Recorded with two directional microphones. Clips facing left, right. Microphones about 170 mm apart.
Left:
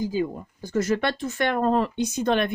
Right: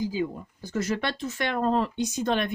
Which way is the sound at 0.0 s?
45° left (ahead or behind).